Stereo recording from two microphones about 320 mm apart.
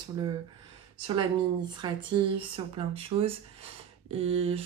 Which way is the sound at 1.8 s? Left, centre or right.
Centre.